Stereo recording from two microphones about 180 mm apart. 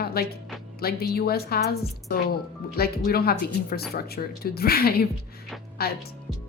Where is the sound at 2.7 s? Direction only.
60° left (ahead or behind).